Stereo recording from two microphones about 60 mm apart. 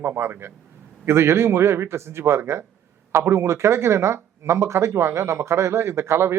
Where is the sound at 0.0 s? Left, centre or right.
Right.